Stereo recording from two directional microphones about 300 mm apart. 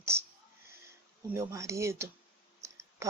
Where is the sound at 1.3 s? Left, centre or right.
Centre.